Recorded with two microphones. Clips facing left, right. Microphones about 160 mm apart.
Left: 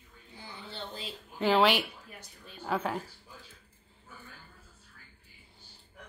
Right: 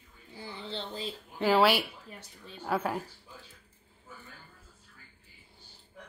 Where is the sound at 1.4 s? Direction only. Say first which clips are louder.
Right 1 dB; 5° right (ahead or behind).